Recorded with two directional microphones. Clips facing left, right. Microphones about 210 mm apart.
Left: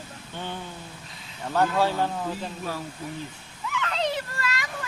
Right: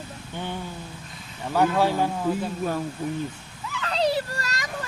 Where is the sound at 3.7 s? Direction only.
35° right (ahead or behind).